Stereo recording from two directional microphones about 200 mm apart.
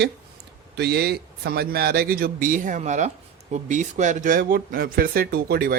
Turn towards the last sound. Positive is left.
turn(degrees=-45)  # may be behind; listen again after turning